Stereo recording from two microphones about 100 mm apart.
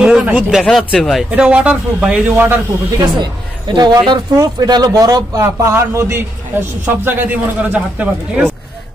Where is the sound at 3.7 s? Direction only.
45° right (ahead or behind).